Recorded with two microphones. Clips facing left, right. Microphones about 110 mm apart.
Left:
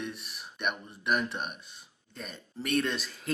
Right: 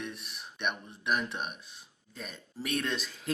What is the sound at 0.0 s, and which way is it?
Speech, centre (ahead or behind).